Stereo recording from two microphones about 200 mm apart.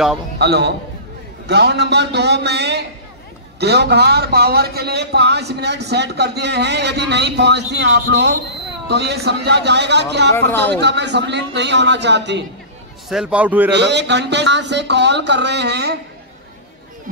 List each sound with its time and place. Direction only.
0.4 s a man's voice: 55° right (ahead or behind)
10.5 s a man's voice: 10° left (ahead or behind)
10.8 s a man's voice: 60° right (ahead or behind)
13.1 s a man's voice: 5° right (ahead or behind)
13.7 s a man's voice: 60° right (ahead or behind)